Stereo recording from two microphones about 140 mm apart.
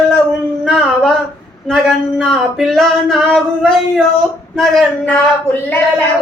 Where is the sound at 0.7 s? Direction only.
5° left (ahead or behind).